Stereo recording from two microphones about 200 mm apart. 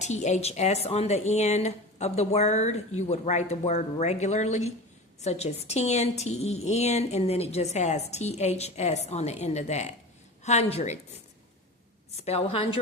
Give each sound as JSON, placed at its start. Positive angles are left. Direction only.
{"t": 0.0, "sound": "a woman's voice", "side_deg": 35}
{"t": 12.1, "sound": "a woman's voice", "side_deg": 30}